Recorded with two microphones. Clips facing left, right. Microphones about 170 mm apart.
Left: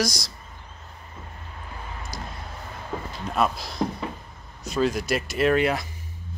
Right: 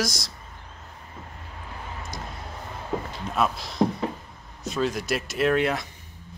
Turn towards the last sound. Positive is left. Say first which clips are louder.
# left 1 dB
turn(degrees=0)  # may be behind; listen again after turning